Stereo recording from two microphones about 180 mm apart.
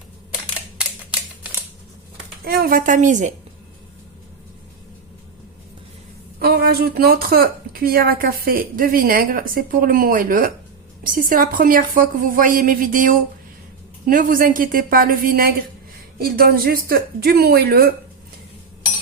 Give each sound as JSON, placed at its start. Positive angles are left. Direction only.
{"t": 2.4, "sound": "a woman's voice", "side_deg": -55}
{"t": 6.4, "sound": "a woman's voice", "side_deg": -60}